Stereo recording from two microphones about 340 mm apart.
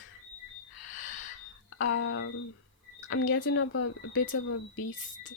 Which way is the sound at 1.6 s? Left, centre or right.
Left.